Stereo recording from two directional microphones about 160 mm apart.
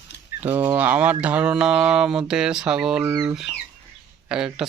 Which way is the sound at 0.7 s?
10° right (ahead or behind).